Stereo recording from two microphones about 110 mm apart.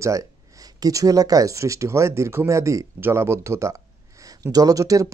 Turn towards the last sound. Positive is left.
turn(degrees=-30)  # may be behind; listen again after turning